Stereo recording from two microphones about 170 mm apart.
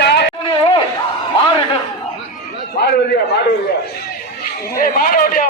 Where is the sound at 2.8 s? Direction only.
70° left (ahead or behind).